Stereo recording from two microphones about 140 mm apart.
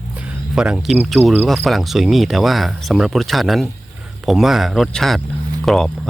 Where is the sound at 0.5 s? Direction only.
5° right (ahead or behind).